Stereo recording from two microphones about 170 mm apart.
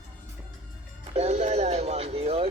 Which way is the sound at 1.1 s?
40° right (ahead or behind).